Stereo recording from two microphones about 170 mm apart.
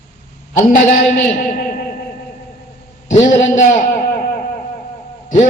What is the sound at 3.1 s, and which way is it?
A man's voice, 50° left (ahead or behind).